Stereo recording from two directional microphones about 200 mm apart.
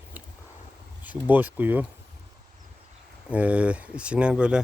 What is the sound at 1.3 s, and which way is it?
Speech, 10° right (ahead or behind).